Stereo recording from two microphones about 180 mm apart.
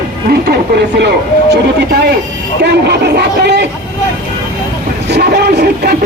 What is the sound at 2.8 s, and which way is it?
Speech, 65° right (ahead or behind).